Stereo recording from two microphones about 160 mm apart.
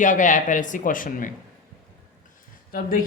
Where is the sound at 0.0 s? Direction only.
50° left (ahead or behind).